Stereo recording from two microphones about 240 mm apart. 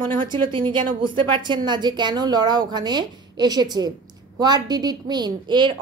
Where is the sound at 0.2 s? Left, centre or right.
Centre.